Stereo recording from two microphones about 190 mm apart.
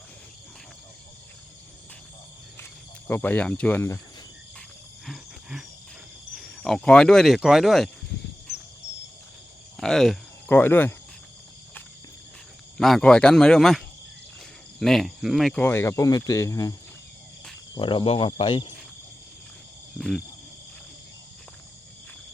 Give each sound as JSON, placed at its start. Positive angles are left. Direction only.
{"t": 3.1, "sound": "speech", "side_deg": 10}
{"t": 5.0, "sound": "wild animals", "side_deg": 0}
{"t": 6.3, "sound": "speech", "side_deg": 0}
{"t": 9.7, "sound": "speech", "side_deg": 0}
{"t": 12.7, "sound": "speech", "side_deg": 0}
{"t": 17.7, "sound": "speech", "side_deg": 25}
{"t": 20.0, "sound": "speech", "side_deg": 0}